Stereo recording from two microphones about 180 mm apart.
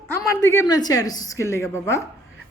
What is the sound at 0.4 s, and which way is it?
A woman's voice, 20° left (ahead or behind).